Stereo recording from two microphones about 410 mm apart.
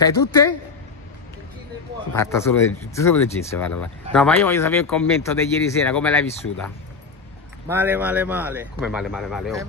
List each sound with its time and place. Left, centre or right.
0.0 s a man's voice: centre
2.1 s speech: centre
7.6 s speech: centre